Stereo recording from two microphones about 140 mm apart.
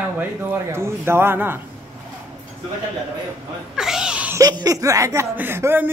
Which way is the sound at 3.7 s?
5° right (ahead or behind).